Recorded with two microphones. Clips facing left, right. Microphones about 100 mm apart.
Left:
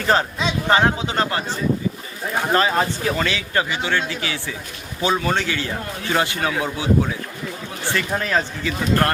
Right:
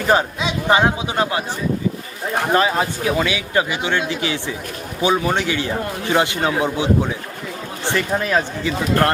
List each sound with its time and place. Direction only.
0.1 s speech: 15° right (ahead or behind)
2.5 s speech: 15° right (ahead or behind)